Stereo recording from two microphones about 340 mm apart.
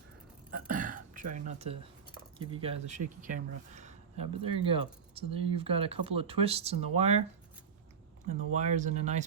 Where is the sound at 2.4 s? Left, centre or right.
Centre.